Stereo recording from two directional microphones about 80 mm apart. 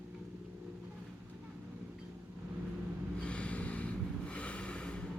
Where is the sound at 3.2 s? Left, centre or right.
Centre.